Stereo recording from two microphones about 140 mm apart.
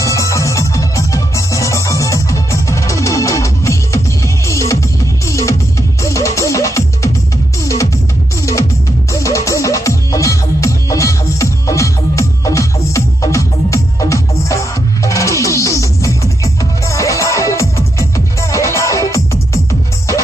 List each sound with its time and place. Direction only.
0.0 s music: 20° left (ahead or behind)
9.1 s music: 20° left (ahead or behind)